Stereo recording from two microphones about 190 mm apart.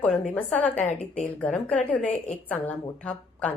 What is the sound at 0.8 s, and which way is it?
Speech, 35° left (ahead or behind).